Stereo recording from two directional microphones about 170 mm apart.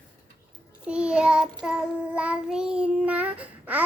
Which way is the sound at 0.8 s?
5° right (ahead or behind).